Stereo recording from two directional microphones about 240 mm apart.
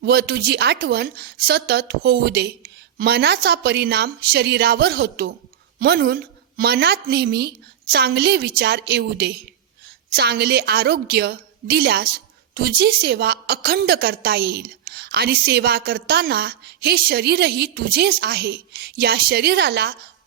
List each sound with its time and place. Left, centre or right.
0.0 s a woman's voice: right